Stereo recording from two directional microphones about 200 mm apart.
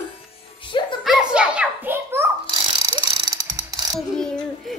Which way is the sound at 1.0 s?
5° right (ahead or behind).